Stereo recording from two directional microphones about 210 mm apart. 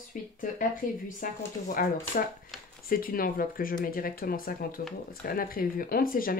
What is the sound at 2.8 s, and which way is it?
Speech, 40° left (ahead or behind).